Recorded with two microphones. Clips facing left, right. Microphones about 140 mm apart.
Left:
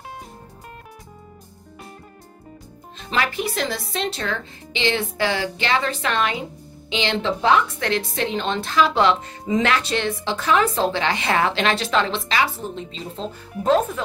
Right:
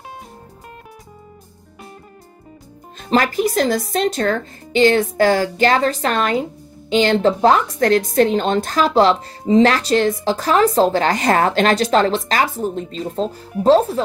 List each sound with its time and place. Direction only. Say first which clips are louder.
3.0 s a woman's voice: right 7 dB; 40° right (ahead or behind)